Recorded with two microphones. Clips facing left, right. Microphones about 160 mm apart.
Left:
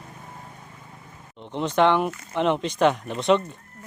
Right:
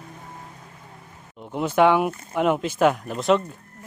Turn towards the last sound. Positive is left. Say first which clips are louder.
# even
turn(degrees=0)  # may be behind; listen again after turning